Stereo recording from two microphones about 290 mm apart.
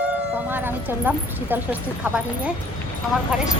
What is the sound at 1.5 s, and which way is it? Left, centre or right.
Speech, centre.